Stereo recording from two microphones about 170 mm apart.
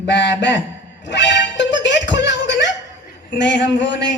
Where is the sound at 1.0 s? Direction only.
90° left.